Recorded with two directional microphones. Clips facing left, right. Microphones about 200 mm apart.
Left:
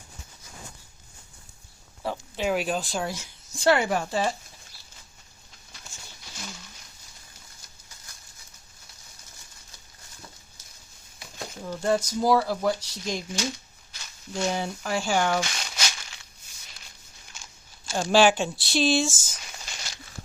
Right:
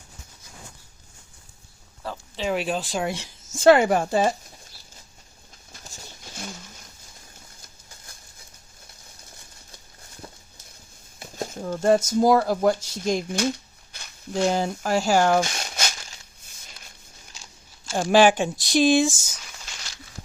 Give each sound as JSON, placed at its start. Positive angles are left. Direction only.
{"t": 2.0, "sound": "speech", "side_deg": 10}
{"t": 3.5, "sound": "speech", "side_deg": -45}
{"t": 5.7, "sound": "a sound", "side_deg": -40}
{"t": 11.2, "sound": "speech", "side_deg": -45}
{"t": 13.9, "sound": "a sound", "side_deg": -50}
{"t": 17.9, "sound": "speech", "side_deg": -15}